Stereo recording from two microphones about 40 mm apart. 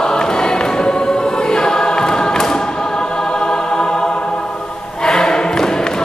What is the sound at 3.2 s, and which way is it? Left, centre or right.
Music, centre.